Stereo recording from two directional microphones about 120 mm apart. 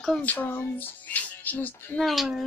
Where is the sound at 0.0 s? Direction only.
10° left (ahead or behind).